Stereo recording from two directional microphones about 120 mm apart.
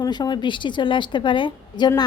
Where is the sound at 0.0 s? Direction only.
40° left (ahead or behind).